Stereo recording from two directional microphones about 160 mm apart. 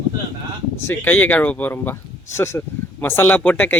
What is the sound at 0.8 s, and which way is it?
Speech, 10° left (ahead or behind).